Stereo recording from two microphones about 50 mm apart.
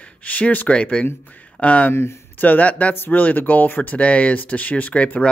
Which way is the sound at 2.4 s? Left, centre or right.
Left.